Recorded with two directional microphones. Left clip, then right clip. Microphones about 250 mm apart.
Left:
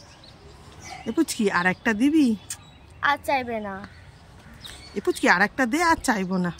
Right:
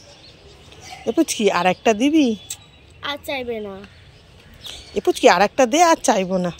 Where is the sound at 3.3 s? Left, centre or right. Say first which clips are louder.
Left 1 dB; left.